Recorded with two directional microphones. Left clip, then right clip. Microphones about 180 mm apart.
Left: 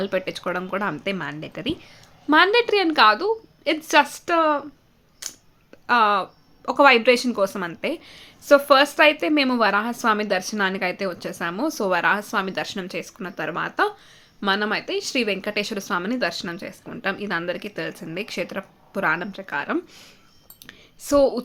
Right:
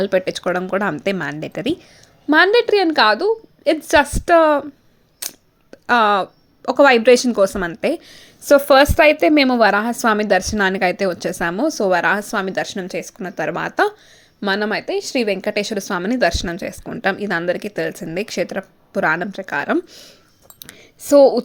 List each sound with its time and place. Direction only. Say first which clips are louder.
0.0 s speech: right 7 dB; 25° right (ahead or behind)
5.2 s camera: right 5 dB; 40° right (ahead or behind)
5.7 s a woman's voice: right 4 dB; 30° right (ahead or behind)
21.0 s speech: right 8 dB; 20° right (ahead or behind)